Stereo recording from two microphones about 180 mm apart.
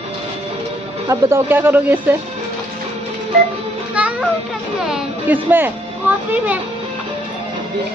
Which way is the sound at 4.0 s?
10° right (ahead or behind).